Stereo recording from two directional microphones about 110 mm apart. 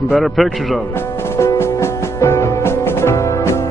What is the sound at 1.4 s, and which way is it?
Music, 25° left (ahead or behind).